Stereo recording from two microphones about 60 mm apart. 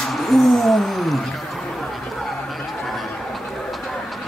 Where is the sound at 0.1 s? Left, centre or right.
Centre.